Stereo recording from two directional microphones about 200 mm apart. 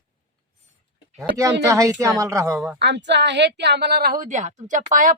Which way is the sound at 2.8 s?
60° right (ahead or behind).